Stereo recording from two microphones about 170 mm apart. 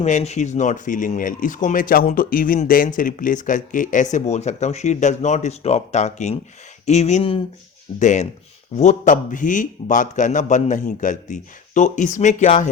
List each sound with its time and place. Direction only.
0.0 s speech: 40° left (ahead or behind)
7.9 s speech: 45° left (ahead or behind)